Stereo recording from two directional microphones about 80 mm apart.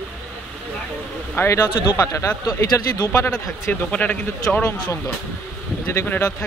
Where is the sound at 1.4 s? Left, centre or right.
Left.